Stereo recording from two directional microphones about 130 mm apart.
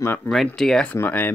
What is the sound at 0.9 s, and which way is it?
Speech, 15° left (ahead or behind).